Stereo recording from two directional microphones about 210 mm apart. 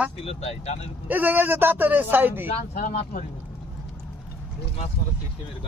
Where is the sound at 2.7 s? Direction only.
40° left (ahead or behind).